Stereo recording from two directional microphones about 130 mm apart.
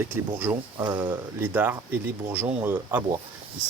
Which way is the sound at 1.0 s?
15° right (ahead or behind).